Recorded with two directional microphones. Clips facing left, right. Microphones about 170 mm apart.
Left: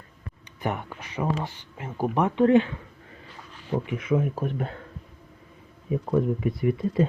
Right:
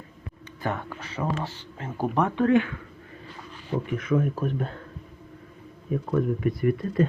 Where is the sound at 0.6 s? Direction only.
15° left (ahead or behind).